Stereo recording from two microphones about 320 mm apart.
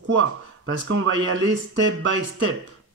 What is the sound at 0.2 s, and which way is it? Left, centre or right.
Speech, right.